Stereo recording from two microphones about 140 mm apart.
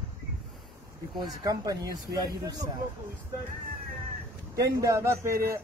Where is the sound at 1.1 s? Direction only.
25° right (ahead or behind).